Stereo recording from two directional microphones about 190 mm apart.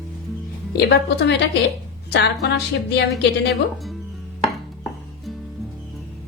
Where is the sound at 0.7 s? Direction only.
55° left (ahead or behind).